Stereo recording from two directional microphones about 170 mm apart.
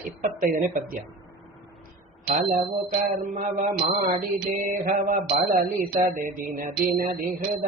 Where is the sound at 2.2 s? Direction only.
45° right (ahead or behind).